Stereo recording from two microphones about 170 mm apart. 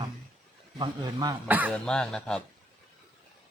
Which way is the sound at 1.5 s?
10° right (ahead or behind).